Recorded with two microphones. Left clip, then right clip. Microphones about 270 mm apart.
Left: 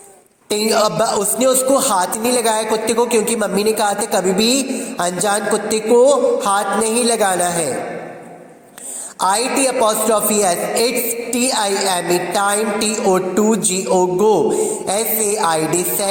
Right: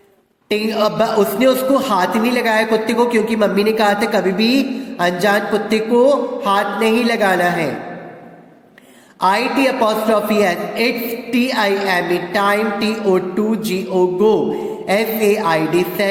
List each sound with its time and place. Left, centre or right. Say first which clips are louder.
0.5 s speech: left 1 dB; left
9.2 s speech: right 1 dB; left